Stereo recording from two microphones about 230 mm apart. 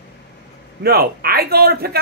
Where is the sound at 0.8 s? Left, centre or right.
Right.